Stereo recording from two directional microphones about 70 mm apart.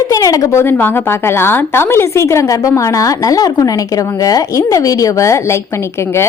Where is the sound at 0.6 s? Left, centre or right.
Left.